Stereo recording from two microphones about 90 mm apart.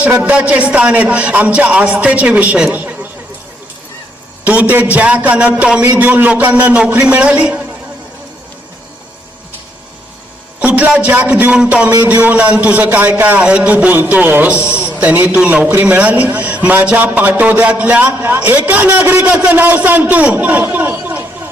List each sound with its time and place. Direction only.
0.0 s a man's voice: 15° right (ahead or behind)
2.7 s a sound: 20° right (ahead or behind)
4.4 s a man's voice: 15° right (ahead or behind)
10.6 s a man's voice: 20° right (ahead or behind)
14.6 s a man's voice: 30° left (ahead or behind)
14.9 s a man's voice: 20° right (ahead or behind)